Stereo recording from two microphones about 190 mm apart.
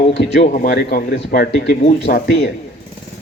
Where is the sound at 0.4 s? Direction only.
45° left (ahead or behind).